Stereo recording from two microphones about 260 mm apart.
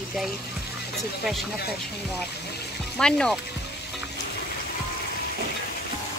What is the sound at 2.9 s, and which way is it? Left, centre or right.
Speech, centre.